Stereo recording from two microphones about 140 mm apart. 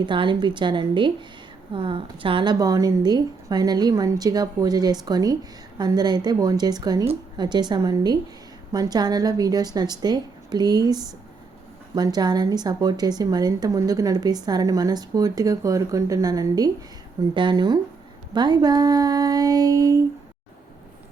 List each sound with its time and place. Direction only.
0.0 s a woman's voice: 35° right (ahead or behind)